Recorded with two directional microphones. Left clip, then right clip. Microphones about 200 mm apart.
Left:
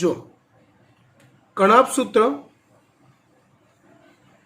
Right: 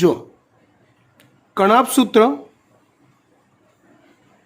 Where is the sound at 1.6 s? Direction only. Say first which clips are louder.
Right 1 dB; 55° right (ahead or behind).